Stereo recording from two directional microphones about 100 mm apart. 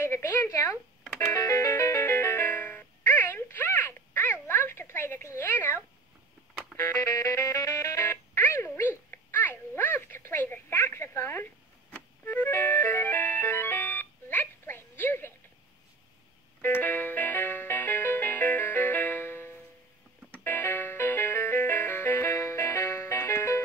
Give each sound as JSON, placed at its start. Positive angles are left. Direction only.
{"t": 0.0, "sound": "a sound", "side_deg": 25}
{"t": 1.3, "sound": "music", "side_deg": 30}
{"t": 6.8, "sound": "music", "side_deg": 30}
{"t": 16.6, "sound": "music", "side_deg": 20}